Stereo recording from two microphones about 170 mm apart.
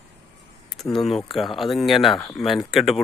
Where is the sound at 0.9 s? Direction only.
Centre (ahead or behind).